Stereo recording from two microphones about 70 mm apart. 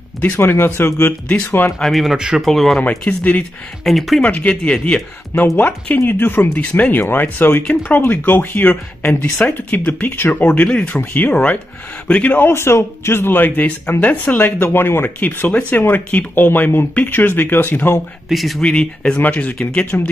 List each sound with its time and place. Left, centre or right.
0.2 s speech: left
1.8 s speech: centre
2.1 s speech: centre
2.4 s speech: centre
2.8 s a man's voice: centre
3.8 s speech: centre
4.2 s a man's voice: left
18.3 s speech: centre
18.6 s speech: centre